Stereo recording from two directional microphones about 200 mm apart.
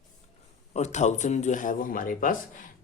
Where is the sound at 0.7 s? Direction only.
35° left (ahead or behind).